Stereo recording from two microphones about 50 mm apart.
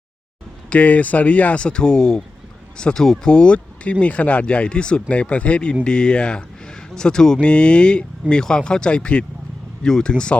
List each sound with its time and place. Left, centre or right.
0.7 s speech: left